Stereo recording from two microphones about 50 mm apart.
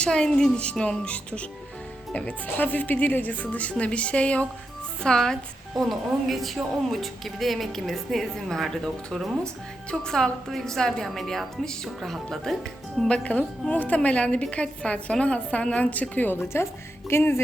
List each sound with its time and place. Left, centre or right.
0.0 s a woman's voice: centre
0.6 s a woman's voice: left
2.6 s a woman's voice: left
5.0 s a woman's voice: centre
5.7 s a woman's voice: centre
13.1 s a woman's voice: left
17.1 s music: left